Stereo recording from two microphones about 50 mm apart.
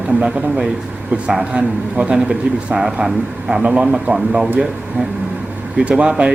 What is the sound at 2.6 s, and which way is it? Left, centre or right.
Speech, centre.